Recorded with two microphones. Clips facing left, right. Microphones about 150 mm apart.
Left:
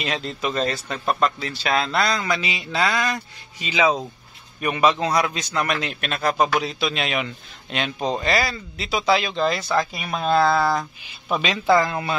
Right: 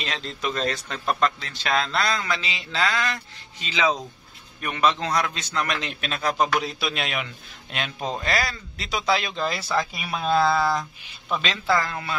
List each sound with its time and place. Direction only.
0.0 s a man's voice: 5° left (ahead or behind)
11.4 s speech: 15° left (ahead or behind)